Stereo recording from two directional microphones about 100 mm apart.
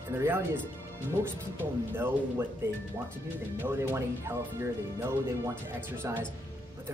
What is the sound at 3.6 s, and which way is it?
Speech, 25° right (ahead or behind).